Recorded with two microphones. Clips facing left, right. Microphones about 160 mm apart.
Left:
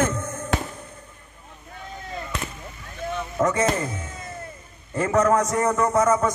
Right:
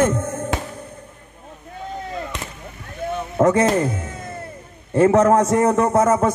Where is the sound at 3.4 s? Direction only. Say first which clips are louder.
Right 6 dB; 60° right (ahead or behind).